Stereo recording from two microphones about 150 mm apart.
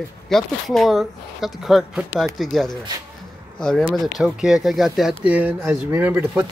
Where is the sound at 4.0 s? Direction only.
5° right (ahead or behind).